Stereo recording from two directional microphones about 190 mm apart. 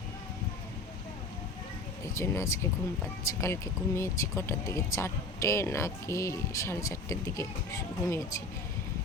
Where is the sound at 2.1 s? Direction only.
15° left (ahead or behind).